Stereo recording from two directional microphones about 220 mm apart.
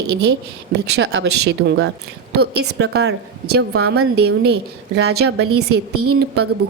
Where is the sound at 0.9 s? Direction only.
50° right (ahead or behind).